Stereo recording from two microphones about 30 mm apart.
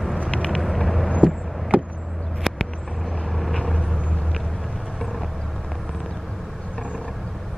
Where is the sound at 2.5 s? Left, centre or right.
Centre.